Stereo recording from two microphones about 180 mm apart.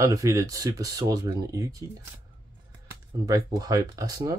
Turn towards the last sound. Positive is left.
turn(degrees=-20)  # may be behind; listen again after turning